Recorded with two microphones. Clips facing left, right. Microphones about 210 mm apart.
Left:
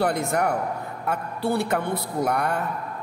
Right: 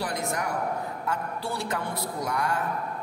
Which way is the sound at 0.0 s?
60° left (ahead or behind).